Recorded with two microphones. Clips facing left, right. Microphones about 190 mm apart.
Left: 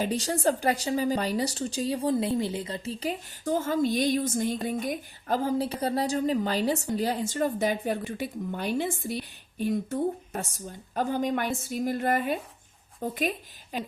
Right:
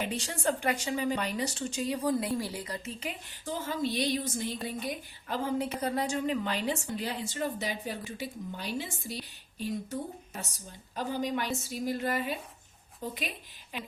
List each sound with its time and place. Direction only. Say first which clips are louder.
0.0 s a woman's voice: left 6 dB; 40° left (ahead or behind)
3.4 s a woman's voice: left 7 dB; 50° left (ahead or behind)